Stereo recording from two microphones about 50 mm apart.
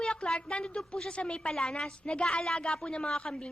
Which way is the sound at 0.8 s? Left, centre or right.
Centre.